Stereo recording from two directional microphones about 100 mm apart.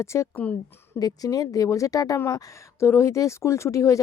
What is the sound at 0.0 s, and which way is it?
Speech, 30° left (ahead or behind).